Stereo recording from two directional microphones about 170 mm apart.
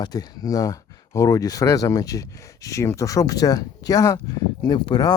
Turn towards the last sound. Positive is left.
turn(degrees=25)  # may be behind; listen again after turning